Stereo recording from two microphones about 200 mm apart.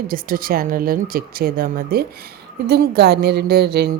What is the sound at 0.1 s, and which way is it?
A woman's voice, 45° right (ahead or behind).